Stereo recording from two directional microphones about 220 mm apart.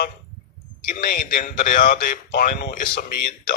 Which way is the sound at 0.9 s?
35° left (ahead or behind).